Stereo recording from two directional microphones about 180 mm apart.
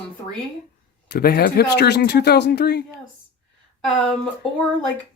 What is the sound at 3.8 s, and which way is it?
Speech, 5° left (ahead or behind).